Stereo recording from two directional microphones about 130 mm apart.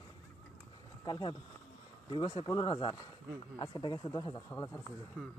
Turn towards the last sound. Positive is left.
turn(degrees=5)  # may be behind; listen again after turning